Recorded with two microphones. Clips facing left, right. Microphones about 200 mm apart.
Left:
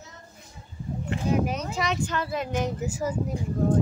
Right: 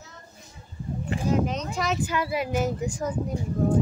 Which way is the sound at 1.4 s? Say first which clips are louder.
Even; 10° left (ahead or behind).